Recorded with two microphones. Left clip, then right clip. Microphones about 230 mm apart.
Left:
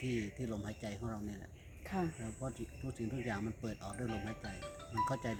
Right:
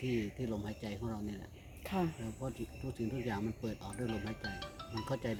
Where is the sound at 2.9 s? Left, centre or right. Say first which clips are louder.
Right 2 dB; centre.